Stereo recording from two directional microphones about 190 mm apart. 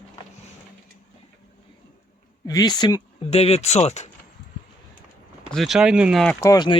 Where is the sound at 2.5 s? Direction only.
20° left (ahead or behind); by 4.1 s 35° left (ahead or behind).